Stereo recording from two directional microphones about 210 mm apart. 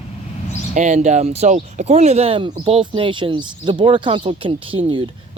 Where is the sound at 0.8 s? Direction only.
35° right (ahead or behind).